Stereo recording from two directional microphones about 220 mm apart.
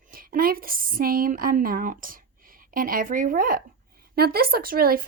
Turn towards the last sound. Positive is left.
turn(degrees=-40)  # may be behind; listen again after turning